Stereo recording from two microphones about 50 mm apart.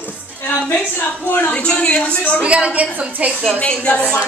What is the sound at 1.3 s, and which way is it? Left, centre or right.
A woman's voice, left.